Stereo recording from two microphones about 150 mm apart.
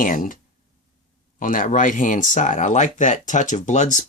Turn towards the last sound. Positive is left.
turn(degrees=50)  # may be behind; listen again after turning